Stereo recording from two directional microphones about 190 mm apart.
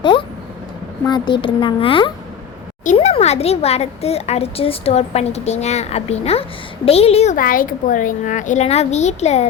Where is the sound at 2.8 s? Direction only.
40° left (ahead or behind).